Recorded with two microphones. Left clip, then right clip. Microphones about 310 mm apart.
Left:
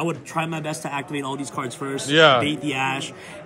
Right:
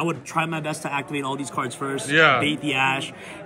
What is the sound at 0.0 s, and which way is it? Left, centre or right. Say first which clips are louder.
A man's voice: right 1 dB; centre.